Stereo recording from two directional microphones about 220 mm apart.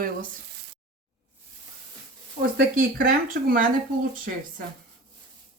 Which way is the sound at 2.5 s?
45° right (ahead or behind).